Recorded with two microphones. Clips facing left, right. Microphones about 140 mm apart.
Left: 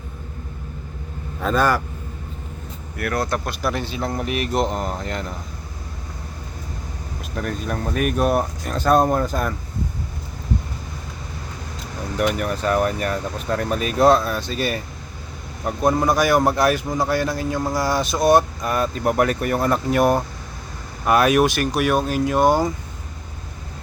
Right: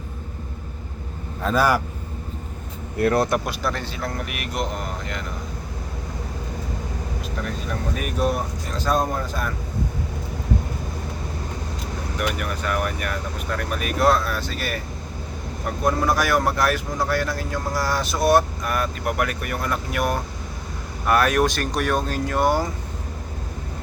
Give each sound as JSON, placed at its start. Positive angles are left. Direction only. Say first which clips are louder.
{"t": 1.4, "sound": "a man's voice", "louder": "left 1 dB", "side_deg": -5}
{"t": 3.0, "sound": "speech", "louder": "right 5 dB", "side_deg": -25}
{"t": 3.6, "sound": "a man's voice", "louder": "left 3 dB", "side_deg": 15}
{"t": 7.9, "sound": "speech", "louder": "left 5 dB", "side_deg": 60}
{"t": 12.4, "sound": "a man's voice", "louder": "left 5 dB", "side_deg": 35}
{"t": 15.8, "sound": "a man's voice", "louder": "left 3 dB", "side_deg": 20}
{"t": 21.1, "sound": "speech", "louder": "left 3 dB", "side_deg": 15}